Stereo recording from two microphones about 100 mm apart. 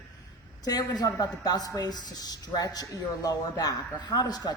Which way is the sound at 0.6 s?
40° left (ahead or behind).